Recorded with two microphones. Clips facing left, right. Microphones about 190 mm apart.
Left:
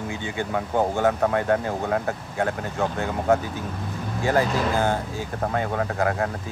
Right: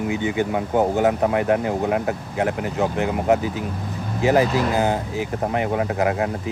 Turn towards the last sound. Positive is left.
turn(degrees=-20)  # may be behind; listen again after turning